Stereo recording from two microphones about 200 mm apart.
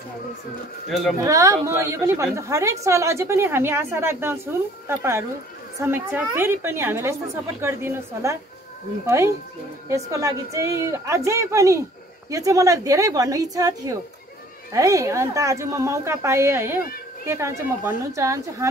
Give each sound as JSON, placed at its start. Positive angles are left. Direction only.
{"t": 0.8, "sound": "speech", "side_deg": 0}
{"t": 1.2, "sound": "a woman's voice", "side_deg": -15}